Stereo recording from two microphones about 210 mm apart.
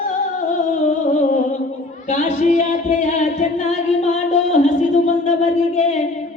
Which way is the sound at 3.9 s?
35° left (ahead or behind).